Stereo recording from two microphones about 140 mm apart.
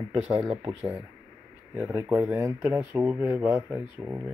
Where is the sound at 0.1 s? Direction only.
50° right (ahead or behind).